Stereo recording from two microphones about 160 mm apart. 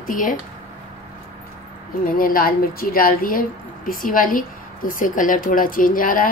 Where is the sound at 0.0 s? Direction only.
55° left (ahead or behind).